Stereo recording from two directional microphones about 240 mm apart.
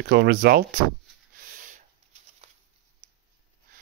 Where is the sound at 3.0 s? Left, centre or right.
Right.